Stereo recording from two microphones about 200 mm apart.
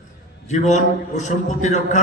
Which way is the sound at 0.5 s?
35° left (ahead or behind).